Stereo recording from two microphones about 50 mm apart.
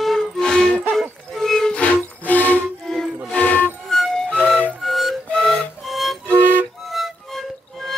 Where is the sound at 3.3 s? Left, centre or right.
Left.